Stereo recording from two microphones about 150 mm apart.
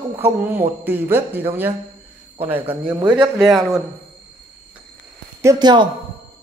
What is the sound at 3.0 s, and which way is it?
Speech, 30° right (ahead or behind).